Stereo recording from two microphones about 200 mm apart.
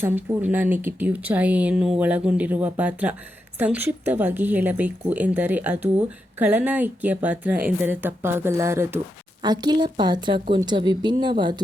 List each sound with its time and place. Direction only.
0.0 s a woman's voice: 10° right (ahead or behind)